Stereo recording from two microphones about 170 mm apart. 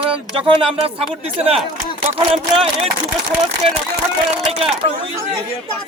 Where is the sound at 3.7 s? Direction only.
35° right (ahead or behind).